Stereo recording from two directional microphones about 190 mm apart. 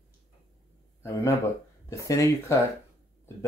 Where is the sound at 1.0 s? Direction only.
15° left (ahead or behind).